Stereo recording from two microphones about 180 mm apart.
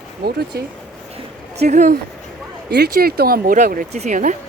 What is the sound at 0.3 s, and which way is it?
Speech, 60° right (ahead or behind).